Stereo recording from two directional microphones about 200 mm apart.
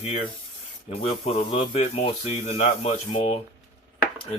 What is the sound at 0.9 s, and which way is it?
Speech, 30° left (ahead or behind).